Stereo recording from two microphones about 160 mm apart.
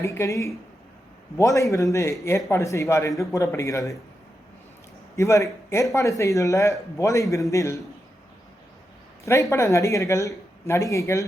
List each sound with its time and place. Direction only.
0.0 s speech: 15° left (ahead or behind)
5.1 s speech: 20° left (ahead or behind)
9.2 s speech: 20° left (ahead or behind)